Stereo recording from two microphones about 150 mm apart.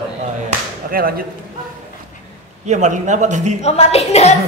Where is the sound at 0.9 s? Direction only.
80° right.